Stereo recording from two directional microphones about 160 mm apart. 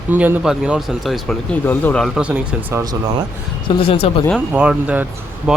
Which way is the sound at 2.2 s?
10° right (ahead or behind).